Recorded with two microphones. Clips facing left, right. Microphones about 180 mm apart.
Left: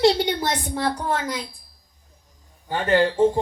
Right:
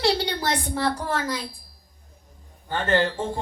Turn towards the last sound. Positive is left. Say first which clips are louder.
# left 6 dB
turn(degrees=15)  # may be behind; listen again after turning